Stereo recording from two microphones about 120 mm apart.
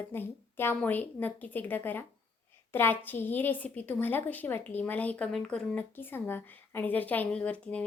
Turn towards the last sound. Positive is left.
turn(degrees=10)  # may be behind; listen again after turning